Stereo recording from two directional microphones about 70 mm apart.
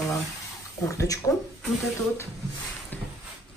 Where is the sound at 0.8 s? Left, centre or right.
Left.